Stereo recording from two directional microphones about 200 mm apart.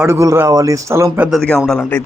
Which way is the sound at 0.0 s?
15° right (ahead or behind).